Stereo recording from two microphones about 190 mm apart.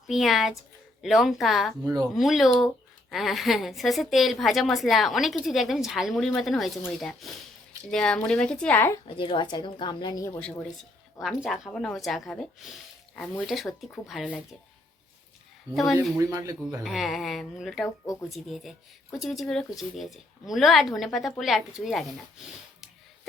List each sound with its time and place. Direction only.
0.1 s speech: centre (ahead or behind)
9.0 s speech: 25° left (ahead or behind)
10.4 s speech: centre (ahead or behind)
15.7 s speech: centre (ahead or behind)
16.1 s speech: 15° right (ahead or behind)
16.8 s speech: centre (ahead or behind)